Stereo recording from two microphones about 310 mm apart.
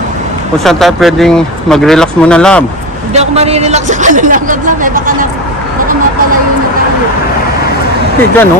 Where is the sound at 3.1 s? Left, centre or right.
Centre.